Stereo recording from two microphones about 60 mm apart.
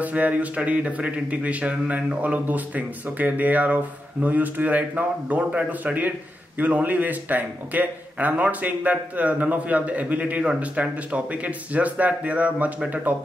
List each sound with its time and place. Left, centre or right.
0.0 s speech: right